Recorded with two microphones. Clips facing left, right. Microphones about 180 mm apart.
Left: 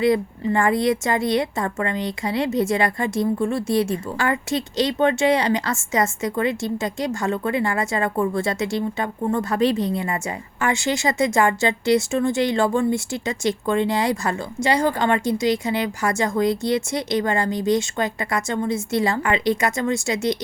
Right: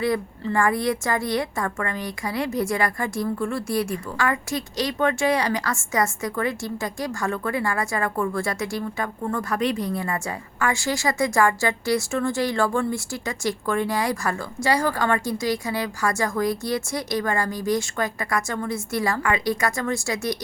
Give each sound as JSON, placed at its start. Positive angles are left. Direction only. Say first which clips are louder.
{"t": 0.0, "sound": "a woman's voice", "louder": "left 5 dB", "side_deg": 20}